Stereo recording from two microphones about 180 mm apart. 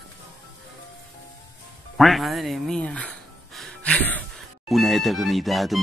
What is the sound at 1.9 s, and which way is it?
Speech, centre (ahead or behind).